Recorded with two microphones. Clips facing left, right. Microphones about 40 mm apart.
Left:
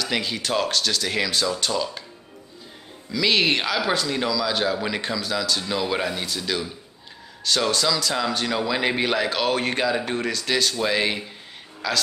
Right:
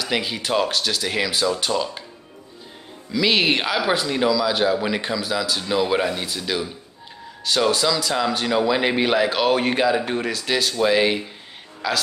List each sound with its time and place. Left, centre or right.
0.0 s speech: centre
3.1 s speech: centre